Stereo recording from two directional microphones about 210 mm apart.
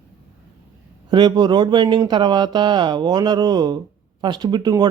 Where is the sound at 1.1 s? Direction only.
20° right (ahead or behind).